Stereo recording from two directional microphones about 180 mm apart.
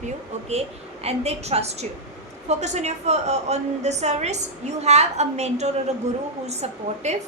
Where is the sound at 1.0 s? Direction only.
35° right (ahead or behind).